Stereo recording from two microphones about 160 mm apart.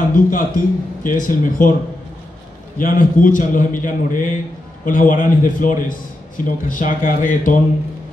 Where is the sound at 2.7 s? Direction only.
60° left (ahead or behind).